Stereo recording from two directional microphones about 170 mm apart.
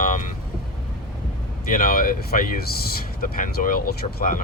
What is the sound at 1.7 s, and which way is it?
Speech, 55° left (ahead or behind).